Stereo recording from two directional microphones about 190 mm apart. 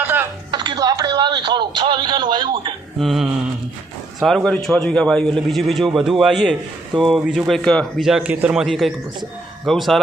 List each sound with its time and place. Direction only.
0.0 s music: 10° right (ahead or behind)
0.5 s a sound: 25° right (ahead or behind)
3.0 s a man's voice: centre (ahead or behind)